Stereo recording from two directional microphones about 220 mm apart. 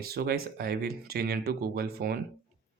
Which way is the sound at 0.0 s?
45° right (ahead or behind).